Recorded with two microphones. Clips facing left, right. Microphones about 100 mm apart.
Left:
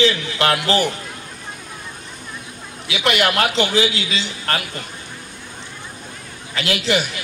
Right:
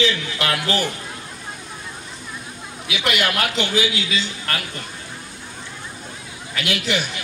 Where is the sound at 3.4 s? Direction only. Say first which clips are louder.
Left 4 dB; 35° left (ahead or behind).